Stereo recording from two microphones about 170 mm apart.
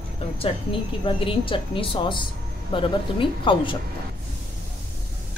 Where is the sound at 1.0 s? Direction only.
30° left (ahead or behind).